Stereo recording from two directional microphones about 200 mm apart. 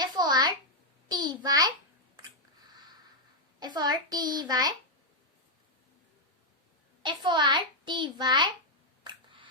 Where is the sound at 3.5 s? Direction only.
20° right (ahead or behind).